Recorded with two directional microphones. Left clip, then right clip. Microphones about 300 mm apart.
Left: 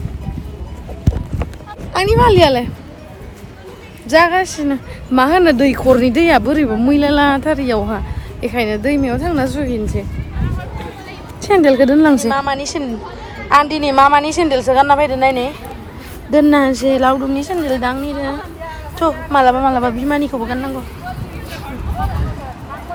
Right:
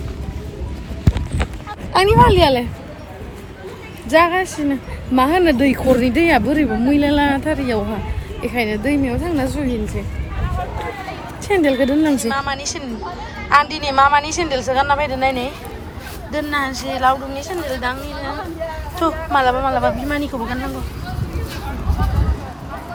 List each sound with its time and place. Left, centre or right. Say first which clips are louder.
2.0 s a woman's voice: left 1 dB; centre
4.1 s speech: left 3 dB; centre
11.4 s speech: left 6 dB; centre
12.1 s a woman's voice: left 5 dB; centre